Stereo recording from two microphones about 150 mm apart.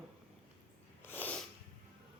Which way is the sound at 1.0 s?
15° left (ahead or behind).